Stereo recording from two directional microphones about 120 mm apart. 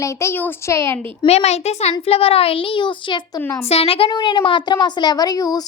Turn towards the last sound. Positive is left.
turn(degrees=30)  # may be behind; listen again after turning